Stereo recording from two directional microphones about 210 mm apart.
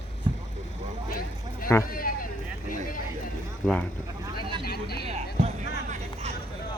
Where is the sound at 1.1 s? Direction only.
40° left (ahead or behind).